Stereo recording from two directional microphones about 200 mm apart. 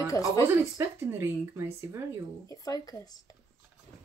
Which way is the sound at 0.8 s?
10° right (ahead or behind).